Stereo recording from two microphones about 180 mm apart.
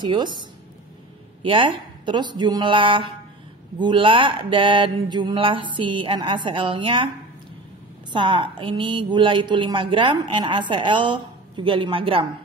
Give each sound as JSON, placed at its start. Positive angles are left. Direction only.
{"t": 0.0, "sound": "speech", "side_deg": -25}
{"t": 8.1, "sound": "speech", "side_deg": -25}